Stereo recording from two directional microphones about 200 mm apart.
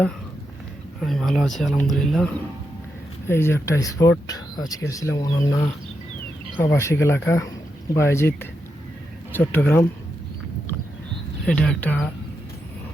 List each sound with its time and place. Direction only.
1.0 s speech: centre (ahead or behind)
11.4 s speech: 5° left (ahead or behind)